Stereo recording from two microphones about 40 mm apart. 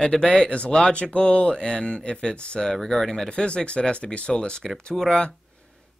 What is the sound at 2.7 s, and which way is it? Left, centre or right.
Speech, centre.